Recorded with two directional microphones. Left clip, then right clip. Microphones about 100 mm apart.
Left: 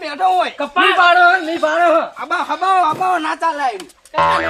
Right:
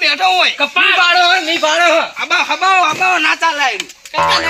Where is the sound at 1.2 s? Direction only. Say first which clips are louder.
Right 1 dB; 60° right (ahead or behind).